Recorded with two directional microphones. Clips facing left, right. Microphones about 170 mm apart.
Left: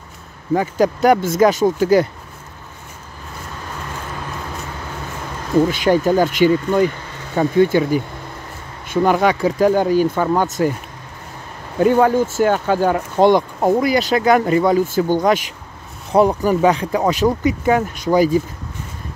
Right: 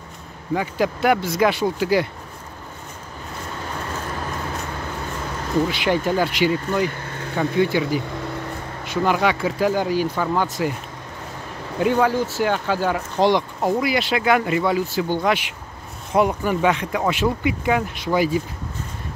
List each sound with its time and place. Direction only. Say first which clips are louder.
0.6 s speech: left 5 dB; 40° left (ahead or behind)
5.7 s speech: left 5 dB; 45° left (ahead or behind)
11.8 s speech: left 5 dB; 45° left (ahead or behind)